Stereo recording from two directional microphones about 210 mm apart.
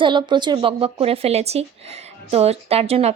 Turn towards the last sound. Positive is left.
turn(degrees=-30)  # may be behind; listen again after turning